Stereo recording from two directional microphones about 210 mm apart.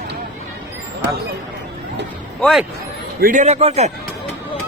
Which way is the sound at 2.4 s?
Centre (ahead or behind).